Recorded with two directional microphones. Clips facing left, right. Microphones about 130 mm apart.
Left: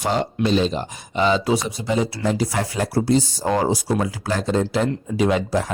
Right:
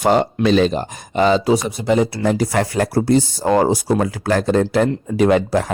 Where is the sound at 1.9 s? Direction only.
60° right (ahead or behind).